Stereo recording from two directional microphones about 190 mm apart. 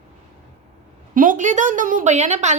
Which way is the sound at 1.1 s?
45° right (ahead or behind).